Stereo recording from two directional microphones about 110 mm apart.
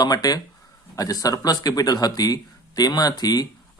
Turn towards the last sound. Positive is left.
turn(degrees=35)  # may be behind; listen again after turning